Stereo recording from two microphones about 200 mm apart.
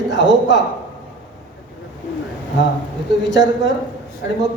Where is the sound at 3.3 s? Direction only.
65° left (ahead or behind).